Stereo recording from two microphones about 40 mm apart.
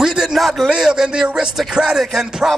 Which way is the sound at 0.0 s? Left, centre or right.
Centre.